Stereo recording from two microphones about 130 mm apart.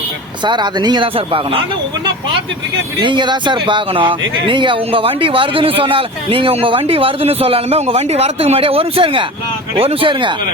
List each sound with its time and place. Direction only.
0.4 s speech: 35° right (ahead or behind)
3.0 s speech: 40° right (ahead or behind)